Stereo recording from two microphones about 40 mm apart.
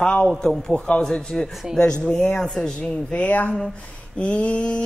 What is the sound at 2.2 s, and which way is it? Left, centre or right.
Speech, left.